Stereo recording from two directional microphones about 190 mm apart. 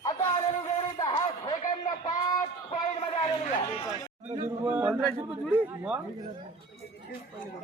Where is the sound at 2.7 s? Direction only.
30° left (ahead or behind).